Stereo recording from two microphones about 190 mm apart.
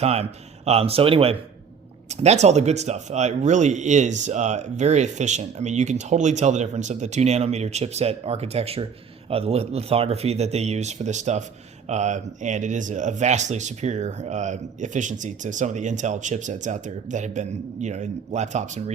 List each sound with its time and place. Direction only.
0.0 s speech: 35° right (ahead or behind)